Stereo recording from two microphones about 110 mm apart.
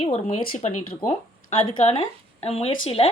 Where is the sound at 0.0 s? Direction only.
75° left (ahead or behind).